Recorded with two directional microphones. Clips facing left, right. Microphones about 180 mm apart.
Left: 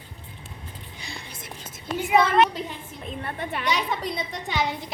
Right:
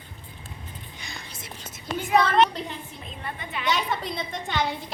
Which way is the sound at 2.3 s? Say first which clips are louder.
Left 1 dB; centre (ahead or behind).